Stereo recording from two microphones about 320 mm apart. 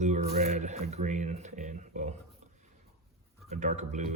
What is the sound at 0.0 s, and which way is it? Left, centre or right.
Speech, right.